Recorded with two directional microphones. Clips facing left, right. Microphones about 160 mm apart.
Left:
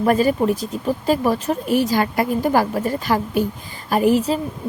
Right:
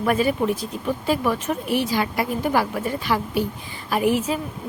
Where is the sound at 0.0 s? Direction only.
40° left (ahead or behind).